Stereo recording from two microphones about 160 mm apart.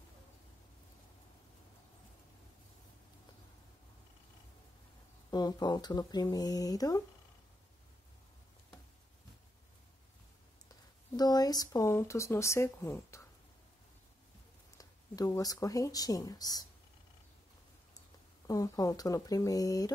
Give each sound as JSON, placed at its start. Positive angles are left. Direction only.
{"t": 5.3, "sound": "speech", "side_deg": 25}
{"t": 11.1, "sound": "speech", "side_deg": 25}
{"t": 14.8, "sound": "speech", "side_deg": 20}
{"t": 18.5, "sound": "speech", "side_deg": 20}